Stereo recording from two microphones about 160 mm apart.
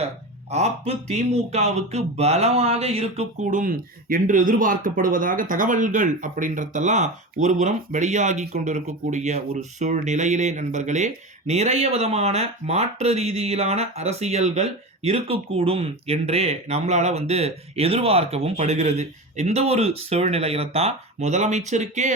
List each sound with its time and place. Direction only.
0.5 s speech: 40° right (ahead or behind)